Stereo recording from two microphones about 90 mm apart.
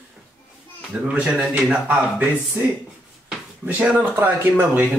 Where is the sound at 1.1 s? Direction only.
15° right (ahead or behind).